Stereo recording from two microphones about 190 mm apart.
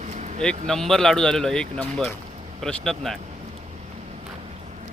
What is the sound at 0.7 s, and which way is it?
A man's voice, centre (ahead or behind).